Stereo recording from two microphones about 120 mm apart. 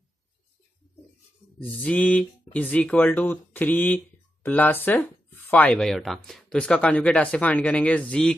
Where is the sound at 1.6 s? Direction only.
15° left (ahead or behind).